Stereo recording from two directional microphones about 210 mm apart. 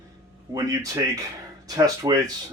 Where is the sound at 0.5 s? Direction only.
15° right (ahead or behind).